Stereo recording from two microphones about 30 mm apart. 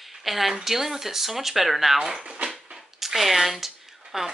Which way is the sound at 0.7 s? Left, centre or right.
Centre.